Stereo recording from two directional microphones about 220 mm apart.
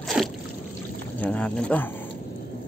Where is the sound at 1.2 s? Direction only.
5° left (ahead or behind).